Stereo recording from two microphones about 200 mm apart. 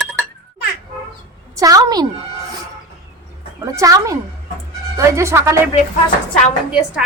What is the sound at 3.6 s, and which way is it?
A child's voice, 15° right (ahead or behind).